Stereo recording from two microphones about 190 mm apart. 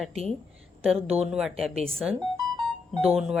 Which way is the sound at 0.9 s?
5° right (ahead or behind).